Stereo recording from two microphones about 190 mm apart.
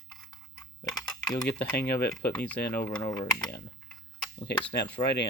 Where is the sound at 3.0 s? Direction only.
20° left (ahead or behind).